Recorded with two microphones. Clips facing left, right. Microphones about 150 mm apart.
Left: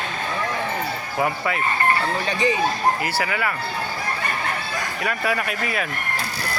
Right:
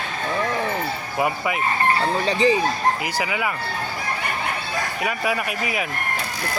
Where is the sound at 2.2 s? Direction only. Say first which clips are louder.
Right 5 dB; 30° right (ahead or behind).